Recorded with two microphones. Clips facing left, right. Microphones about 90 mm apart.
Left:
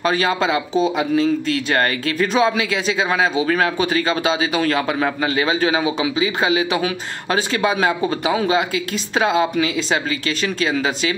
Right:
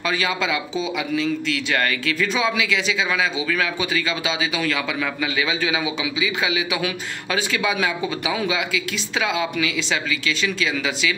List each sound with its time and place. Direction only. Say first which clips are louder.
0.0 s speech: left 5 dB; 40° left (ahead or behind)